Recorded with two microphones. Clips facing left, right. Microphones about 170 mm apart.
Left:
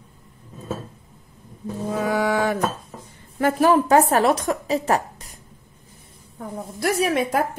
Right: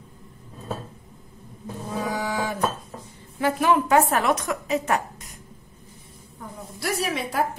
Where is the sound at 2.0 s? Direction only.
65° left (ahead or behind).